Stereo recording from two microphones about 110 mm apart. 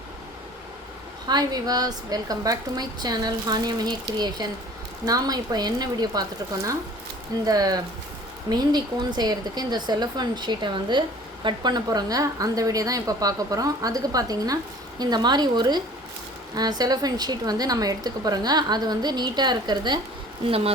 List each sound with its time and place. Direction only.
1.3 s a woman's voice: 35° right (ahead or behind)
7.4 s a woman's voice: 35° right (ahead or behind)